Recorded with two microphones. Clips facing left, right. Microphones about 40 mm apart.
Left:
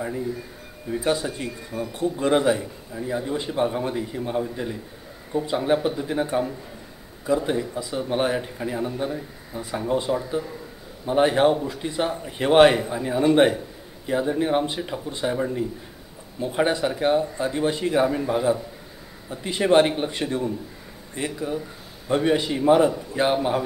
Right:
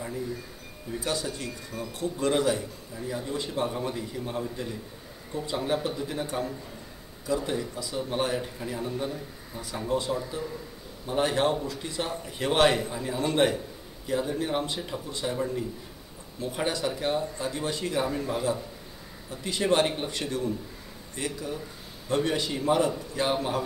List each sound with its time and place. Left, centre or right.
0.8 s speech: left